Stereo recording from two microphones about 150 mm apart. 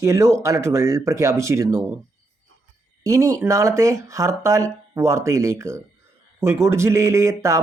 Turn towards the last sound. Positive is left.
turn(degrees=-20)  # may be behind; listen again after turning